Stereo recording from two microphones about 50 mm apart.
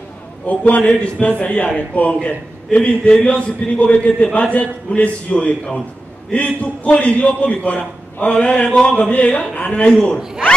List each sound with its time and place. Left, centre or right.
0.5 s a man's voice: left